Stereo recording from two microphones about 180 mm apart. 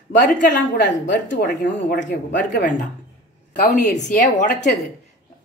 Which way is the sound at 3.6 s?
60° left (ahead or behind).